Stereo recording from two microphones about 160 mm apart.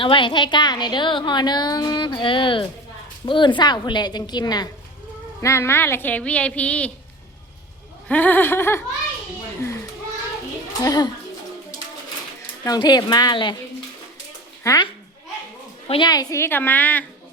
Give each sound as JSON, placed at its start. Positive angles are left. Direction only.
{"t": 0.0, "sound": "a woman's voice", "side_deg": 30}
{"t": 8.0, "sound": "a woman's voice", "side_deg": 10}
{"t": 10.8, "sound": "a woman's voice", "side_deg": 25}
{"t": 12.6, "sound": "a woman's voice", "side_deg": 25}
{"t": 14.6, "sound": "speech", "side_deg": 20}
{"t": 15.9, "sound": "a woman's voice", "side_deg": 25}